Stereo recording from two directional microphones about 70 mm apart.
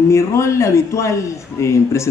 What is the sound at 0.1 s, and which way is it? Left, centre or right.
A man's voice, left.